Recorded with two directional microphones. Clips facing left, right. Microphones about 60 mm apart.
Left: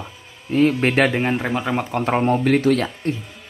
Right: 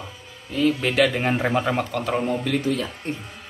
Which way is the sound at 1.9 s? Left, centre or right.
Left.